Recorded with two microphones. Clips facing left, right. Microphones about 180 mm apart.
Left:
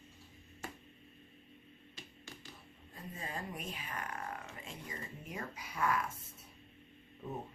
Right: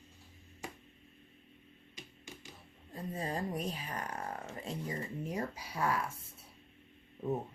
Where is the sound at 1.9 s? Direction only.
20° right (ahead or behind).